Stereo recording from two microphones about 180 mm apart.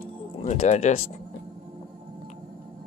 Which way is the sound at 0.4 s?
40° left (ahead or behind).